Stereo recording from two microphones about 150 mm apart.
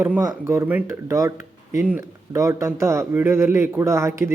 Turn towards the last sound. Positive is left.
turn(degrees=-20)  # may be behind; listen again after turning